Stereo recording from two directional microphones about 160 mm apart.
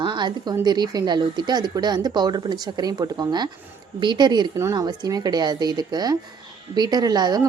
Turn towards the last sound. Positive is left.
turn(degrees=-25)  # may be behind; listen again after turning